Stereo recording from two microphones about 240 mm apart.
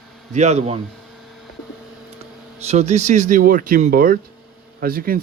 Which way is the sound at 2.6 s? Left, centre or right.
Right.